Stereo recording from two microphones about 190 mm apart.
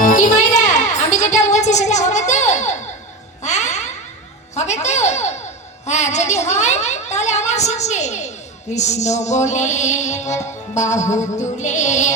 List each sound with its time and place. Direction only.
0.0 s music: 45° left (ahead or behind)
4.5 s a woman's voice: 35° left (ahead or behind)